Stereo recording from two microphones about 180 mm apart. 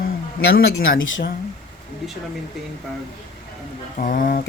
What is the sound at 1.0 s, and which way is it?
Speech, 90° left.